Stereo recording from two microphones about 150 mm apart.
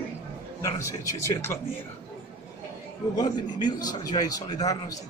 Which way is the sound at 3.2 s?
30° left (ahead or behind).